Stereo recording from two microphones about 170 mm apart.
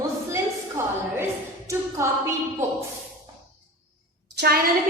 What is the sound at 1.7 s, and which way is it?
Speech, 15° right (ahead or behind).